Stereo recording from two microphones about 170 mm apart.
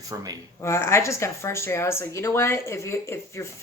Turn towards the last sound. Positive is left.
turn(degrees=15)  # may be behind; listen again after turning